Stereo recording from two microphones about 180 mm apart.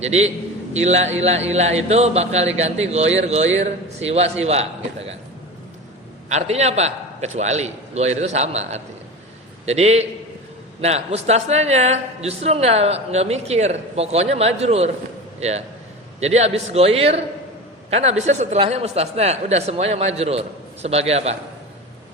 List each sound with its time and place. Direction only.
0.0 s speech: 35° right (ahead or behind)
6.2 s speech: 40° right (ahead or behind)